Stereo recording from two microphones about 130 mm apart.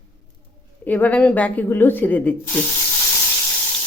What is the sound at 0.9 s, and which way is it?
A woman's voice, 15° left (ahead or behind).